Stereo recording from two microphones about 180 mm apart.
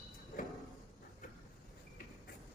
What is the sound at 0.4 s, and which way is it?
Sliding door, 50° left (ahead or behind).